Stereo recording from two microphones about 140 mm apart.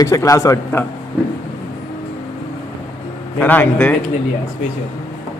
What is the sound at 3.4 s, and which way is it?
Speech, 10° left (ahead or behind).